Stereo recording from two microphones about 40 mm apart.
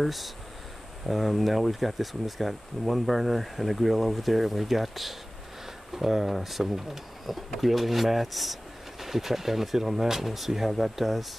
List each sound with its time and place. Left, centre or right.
0.0 s speech: centre